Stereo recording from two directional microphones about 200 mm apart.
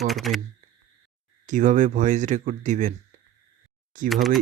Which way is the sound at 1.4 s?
40° right (ahead or behind).